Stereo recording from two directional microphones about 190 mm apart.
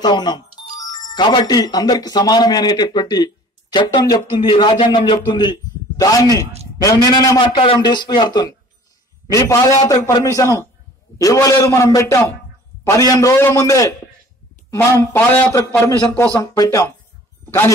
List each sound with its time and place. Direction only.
0.0 s a man's voice: 20° left (ahead or behind)